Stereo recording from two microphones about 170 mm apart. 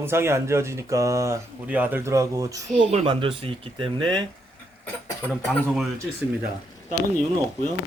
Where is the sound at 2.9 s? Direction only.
30° right (ahead or behind).